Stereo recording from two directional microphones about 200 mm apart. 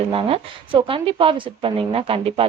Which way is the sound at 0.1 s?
25° right (ahead or behind).